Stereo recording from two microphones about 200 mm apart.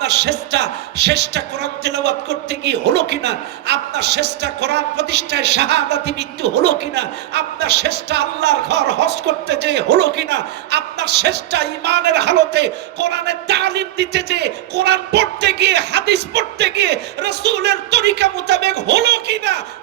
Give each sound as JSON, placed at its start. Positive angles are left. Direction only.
{"t": 0.0, "sound": "a man's voice", "side_deg": -55}